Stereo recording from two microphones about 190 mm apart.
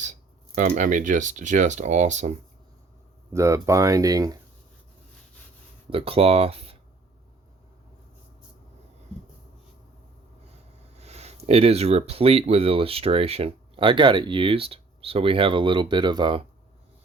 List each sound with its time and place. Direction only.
0.0 s speech: 40° right (ahead or behind)
3.3 s speech: 15° right (ahead or behind)
5.9 s speech: 30° right (ahead or behind)
10.9 s speech: 35° right (ahead or behind)